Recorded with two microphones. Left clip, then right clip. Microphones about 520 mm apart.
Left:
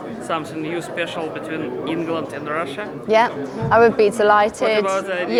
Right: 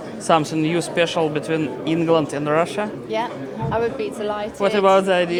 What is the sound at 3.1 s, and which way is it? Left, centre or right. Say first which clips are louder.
A woman's voice: left 12 dB; left.